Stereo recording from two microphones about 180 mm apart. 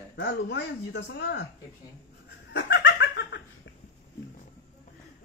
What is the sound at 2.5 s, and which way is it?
Giggle, 75° left (ahead or behind).